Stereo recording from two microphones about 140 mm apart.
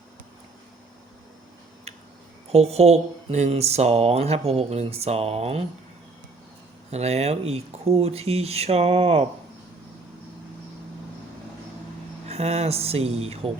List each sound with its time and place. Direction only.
2.5 s speech: 50° right (ahead or behind)
6.9 s speech: 50° right (ahead or behind)
12.3 s speech: 50° right (ahead or behind)